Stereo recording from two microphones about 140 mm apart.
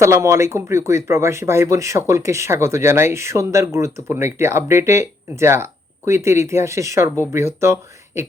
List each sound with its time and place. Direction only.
0.0 s speech: 20° right (ahead or behind)